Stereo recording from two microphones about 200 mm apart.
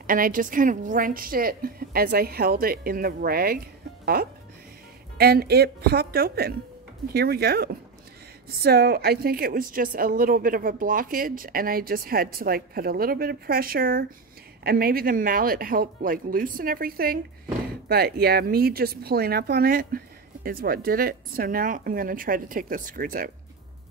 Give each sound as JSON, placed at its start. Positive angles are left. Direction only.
{"t": 0.0, "sound": "a woman's voice", "side_deg": -45}